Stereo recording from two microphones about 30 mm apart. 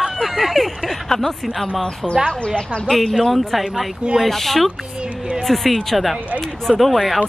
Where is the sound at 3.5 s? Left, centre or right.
Centre.